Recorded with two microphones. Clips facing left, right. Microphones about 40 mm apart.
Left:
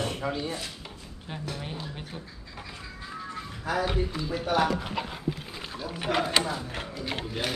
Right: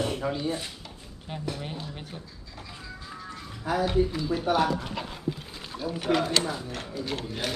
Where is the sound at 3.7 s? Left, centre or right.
Centre.